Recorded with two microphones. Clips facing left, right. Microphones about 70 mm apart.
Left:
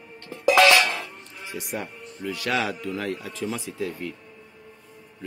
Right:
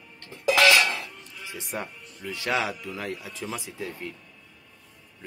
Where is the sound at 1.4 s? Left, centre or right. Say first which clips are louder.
Left 4 dB; left.